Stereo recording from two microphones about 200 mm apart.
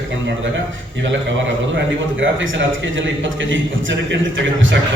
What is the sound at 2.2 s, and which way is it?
Speech, 70° right (ahead or behind).